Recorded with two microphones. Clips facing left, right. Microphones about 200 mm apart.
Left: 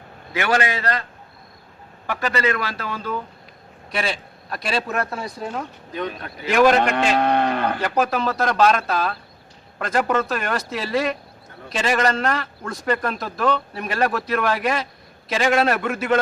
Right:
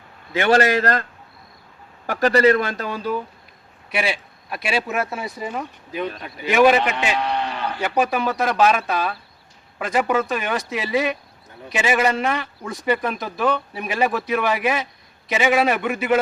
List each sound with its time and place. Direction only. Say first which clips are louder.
0.3 s a man's voice: right 4 dB; 25° right (ahead or behind)
0.6 s a man's voice: right 5 dB; 45° right (ahead or behind)
2.0 s a man's voice: right 7 dB; 40° right (ahead or behind)
2.6 s a man's voice: right 4 dB; 20° right (ahead or behind); by 6.7 s 5° right (ahead or behind)
7.2 s cattle: left 5 dB; 50° left (ahead or behind)
7.8 s a man's voice: even; centre (ahead or behind)